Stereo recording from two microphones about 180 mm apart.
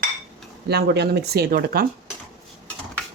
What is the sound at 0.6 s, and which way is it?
Speech, 65° right (ahead or behind).